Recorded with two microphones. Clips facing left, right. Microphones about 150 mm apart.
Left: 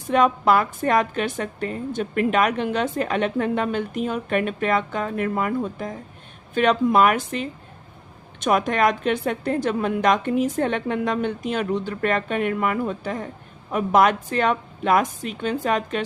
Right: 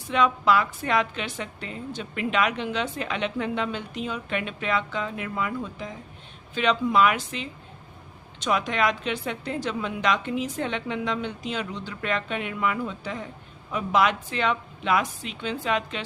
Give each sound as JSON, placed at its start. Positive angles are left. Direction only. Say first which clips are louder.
{"t": 0.1, "sound": "a woman's voice", "louder": "left 4 dB", "side_deg": 50}